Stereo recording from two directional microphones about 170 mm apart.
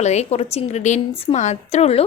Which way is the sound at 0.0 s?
40° left (ahead or behind).